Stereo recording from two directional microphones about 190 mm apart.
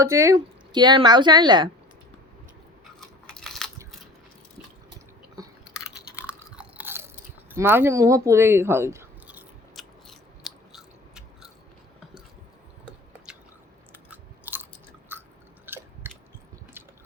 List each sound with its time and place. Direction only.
0.0 s speech: 15° right (ahead or behind)
3.0 s crunch: 5° left (ahead or behind)
6.2 s chewing: 10° right (ahead or behind)
14.1 s chewing: 10° right (ahead or behind)